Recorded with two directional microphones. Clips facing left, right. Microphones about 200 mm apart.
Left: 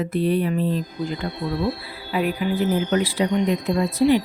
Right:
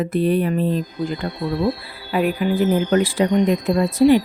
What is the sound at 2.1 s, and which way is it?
A woman's voice, 50° right (ahead or behind).